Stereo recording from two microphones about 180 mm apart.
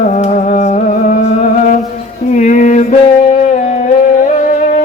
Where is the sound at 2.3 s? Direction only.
45° left (ahead or behind).